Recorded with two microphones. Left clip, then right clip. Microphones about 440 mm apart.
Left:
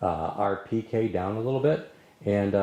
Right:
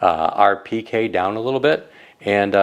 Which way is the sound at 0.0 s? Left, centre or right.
Centre.